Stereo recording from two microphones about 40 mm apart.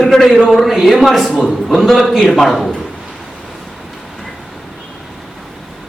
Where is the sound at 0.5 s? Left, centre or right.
Centre.